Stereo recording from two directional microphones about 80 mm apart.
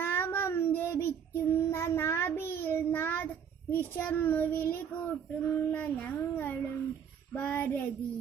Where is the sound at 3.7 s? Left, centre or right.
Left.